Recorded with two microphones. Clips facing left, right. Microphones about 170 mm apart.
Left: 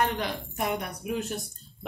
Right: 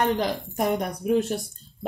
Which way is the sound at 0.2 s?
35° right (ahead or behind).